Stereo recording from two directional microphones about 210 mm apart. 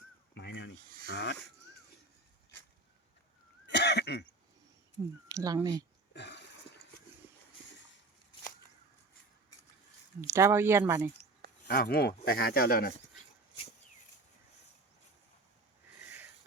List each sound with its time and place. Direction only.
0.3 s snake: 55° left (ahead or behind)
1.1 s speech: 55° left (ahead or behind)
3.7 s cough: 55° left (ahead or behind)
5.3 s speech: 15° right (ahead or behind)
6.1 s a sound: 55° left (ahead or behind)
10.2 s speech: 15° right (ahead or behind)
11.7 s speech: 45° left (ahead or behind)